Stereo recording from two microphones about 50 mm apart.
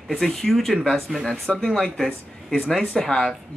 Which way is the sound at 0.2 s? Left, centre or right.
Centre.